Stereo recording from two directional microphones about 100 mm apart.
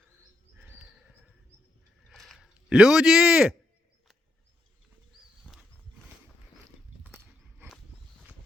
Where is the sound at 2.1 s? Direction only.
Centre (ahead or behind).